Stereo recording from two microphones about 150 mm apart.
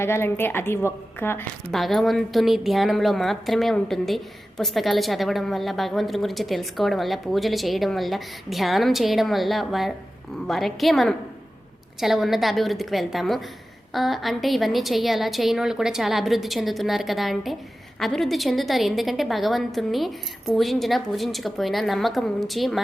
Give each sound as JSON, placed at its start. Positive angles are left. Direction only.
{"t": 0.0, "sound": "a woman's voice", "side_deg": 15}
{"t": 1.7, "sound": "a woman's voice", "side_deg": 0}